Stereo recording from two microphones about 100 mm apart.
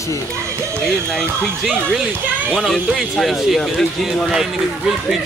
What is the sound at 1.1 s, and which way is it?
Speech, 5° left (ahead or behind).